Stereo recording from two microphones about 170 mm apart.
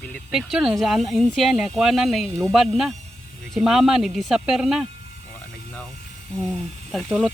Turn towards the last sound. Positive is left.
turn(degrees=0)  # may be behind; listen again after turning